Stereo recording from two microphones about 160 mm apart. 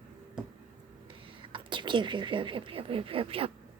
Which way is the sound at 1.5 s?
30° right (ahead or behind).